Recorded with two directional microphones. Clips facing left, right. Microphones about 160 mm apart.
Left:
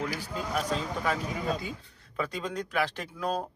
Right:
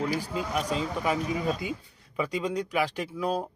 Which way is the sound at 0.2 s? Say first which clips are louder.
Right 2 dB; 10° right (ahead or behind).